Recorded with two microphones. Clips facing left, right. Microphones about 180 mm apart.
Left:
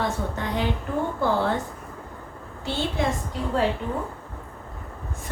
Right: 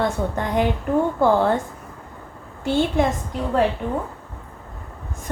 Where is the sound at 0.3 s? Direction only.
55° right (ahead or behind).